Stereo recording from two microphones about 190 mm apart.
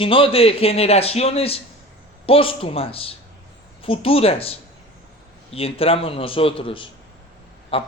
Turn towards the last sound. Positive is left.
turn(degrees=30)  # may be behind; listen again after turning